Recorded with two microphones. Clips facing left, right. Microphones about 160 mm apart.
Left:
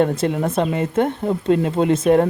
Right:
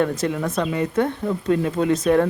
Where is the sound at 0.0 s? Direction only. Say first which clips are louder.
Left 3 dB; 30° left (ahead or behind).